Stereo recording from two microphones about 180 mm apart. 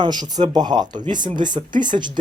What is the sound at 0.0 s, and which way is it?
Speech, 25° right (ahead or behind).